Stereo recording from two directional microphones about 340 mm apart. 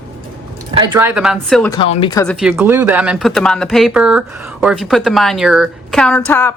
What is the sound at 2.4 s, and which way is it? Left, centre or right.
Speech, centre.